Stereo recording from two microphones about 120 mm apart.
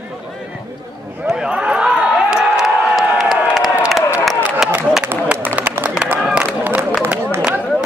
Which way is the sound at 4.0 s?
20° left (ahead or behind).